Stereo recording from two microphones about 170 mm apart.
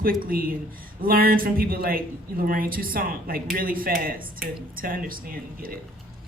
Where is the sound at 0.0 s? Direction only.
60° right (ahead or behind).